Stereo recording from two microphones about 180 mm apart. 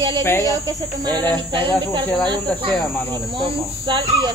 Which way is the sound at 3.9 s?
25° right (ahead or behind).